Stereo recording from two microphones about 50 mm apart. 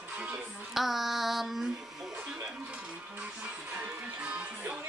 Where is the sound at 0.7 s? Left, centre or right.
Centre.